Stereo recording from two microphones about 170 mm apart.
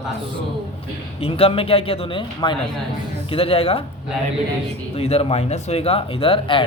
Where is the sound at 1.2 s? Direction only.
35° left (ahead or behind).